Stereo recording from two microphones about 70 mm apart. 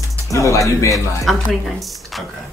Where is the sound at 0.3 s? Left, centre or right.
Left.